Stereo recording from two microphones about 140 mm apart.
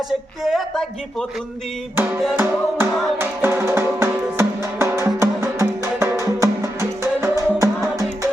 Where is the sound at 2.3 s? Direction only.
15° right (ahead or behind).